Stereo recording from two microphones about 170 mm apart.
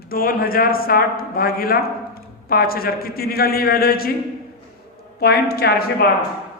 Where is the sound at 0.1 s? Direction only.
60° left (ahead or behind).